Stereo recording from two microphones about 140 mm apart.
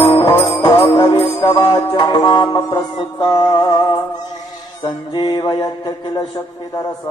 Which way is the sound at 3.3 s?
35° left (ahead or behind).